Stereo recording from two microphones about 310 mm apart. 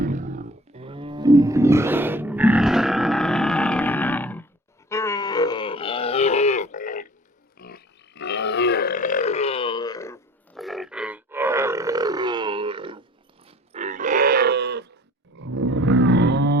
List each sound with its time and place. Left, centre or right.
0.0 s roaring cats: right; by 4.4 s centre
4.9 s grunt: centre; by 7.1 s left
7.6 s burping: left; by 13.1 s centre
13.7 s wild animals: right
15.4 s roaring cats: right